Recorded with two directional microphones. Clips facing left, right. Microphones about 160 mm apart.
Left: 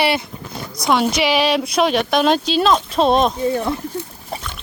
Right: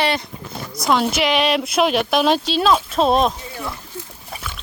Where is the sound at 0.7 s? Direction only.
Centre (ahead or behind).